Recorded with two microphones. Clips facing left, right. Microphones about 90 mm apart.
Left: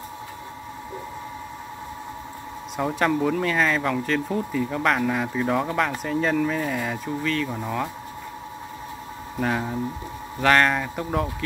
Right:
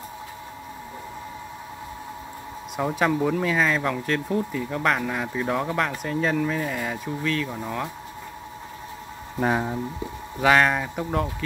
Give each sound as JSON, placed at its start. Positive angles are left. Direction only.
{"t": 2.8, "sound": "speech", "side_deg": -5}
{"t": 9.4, "sound": "speech", "side_deg": -15}
{"t": 10.4, "sound": "speech", "side_deg": -5}